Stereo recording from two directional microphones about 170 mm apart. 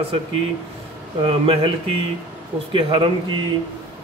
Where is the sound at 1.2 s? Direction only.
35° right (ahead or behind).